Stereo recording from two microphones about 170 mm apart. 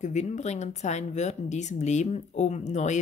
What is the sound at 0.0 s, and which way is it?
Speech, 45° left (ahead or behind).